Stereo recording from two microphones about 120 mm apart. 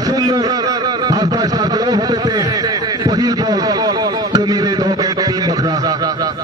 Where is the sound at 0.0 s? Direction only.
30° right (ahead or behind).